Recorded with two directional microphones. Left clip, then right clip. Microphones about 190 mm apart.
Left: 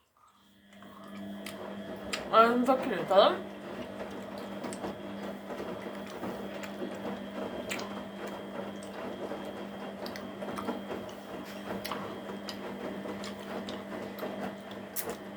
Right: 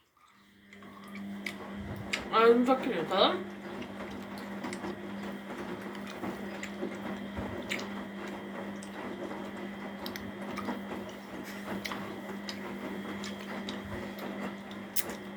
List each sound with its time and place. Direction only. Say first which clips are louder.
2.0 s speech: even; 25° left (ahead or behind)